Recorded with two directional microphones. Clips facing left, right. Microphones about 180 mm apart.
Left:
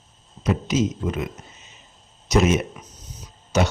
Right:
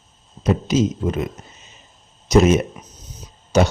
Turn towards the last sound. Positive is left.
turn(degrees=-35)  # may be behind; listen again after turning